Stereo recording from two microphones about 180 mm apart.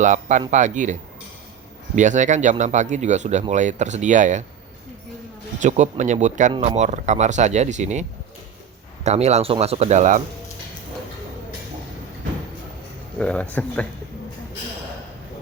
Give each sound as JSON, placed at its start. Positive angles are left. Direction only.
{"t": 0.0, "sound": "speech", "side_deg": -40}
{"t": 2.0, "sound": "speech", "side_deg": -45}
{"t": 5.5, "sound": "speech", "side_deg": -40}
{"t": 9.0, "sound": "speech", "side_deg": -35}
{"t": 13.1, "sound": "speech", "side_deg": 5}